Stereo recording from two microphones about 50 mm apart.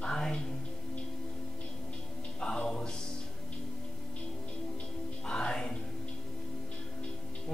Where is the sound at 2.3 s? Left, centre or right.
Centre.